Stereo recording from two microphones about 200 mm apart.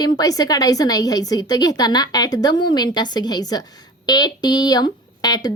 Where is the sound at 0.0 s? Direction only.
20° left (ahead or behind).